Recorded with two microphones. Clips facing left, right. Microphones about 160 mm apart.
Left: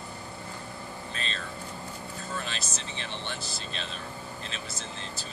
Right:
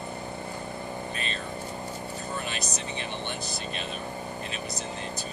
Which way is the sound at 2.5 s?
15° right (ahead or behind).